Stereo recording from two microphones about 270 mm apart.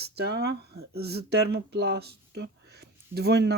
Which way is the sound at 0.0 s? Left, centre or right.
Right.